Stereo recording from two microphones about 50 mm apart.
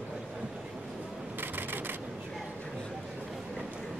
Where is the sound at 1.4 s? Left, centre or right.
Right.